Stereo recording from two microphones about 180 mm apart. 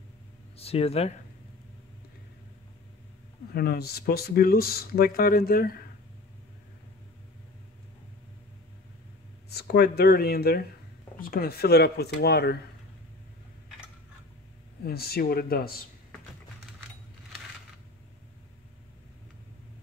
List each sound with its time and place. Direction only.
0.6 s speech: 35° left (ahead or behind)
3.5 s speech: 60° left (ahead or behind)
9.5 s speech: 60° left (ahead or behind)
14.8 s speech: 60° left (ahead or behind)